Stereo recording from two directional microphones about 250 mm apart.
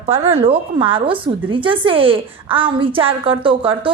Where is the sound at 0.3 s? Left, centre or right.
Right.